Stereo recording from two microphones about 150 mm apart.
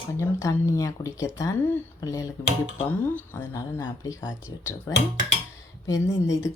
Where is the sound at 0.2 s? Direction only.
20° left (ahead or behind).